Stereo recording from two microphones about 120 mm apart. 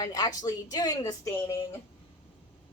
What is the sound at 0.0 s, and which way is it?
A woman's voice, 30° left (ahead or behind).